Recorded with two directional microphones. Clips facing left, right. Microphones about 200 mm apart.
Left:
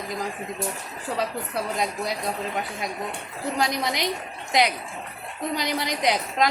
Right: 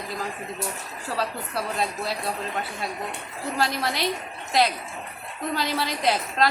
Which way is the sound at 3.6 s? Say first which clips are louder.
Even; 15° left (ahead or behind).